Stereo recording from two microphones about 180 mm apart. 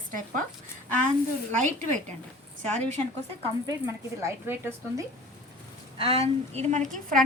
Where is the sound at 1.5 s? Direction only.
40° right (ahead or behind).